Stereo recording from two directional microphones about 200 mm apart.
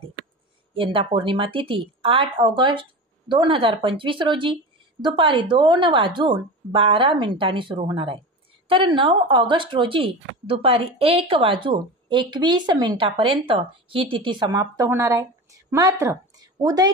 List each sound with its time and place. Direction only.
0.7 s speech: 25° right (ahead or behind)